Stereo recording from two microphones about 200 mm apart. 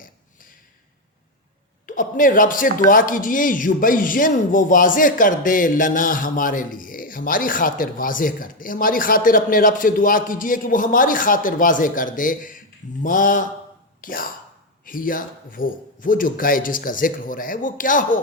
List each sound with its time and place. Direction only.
1.9 s a man's voice: 45° left (ahead or behind)